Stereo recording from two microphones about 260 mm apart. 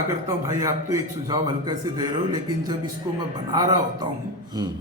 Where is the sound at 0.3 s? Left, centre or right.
Centre.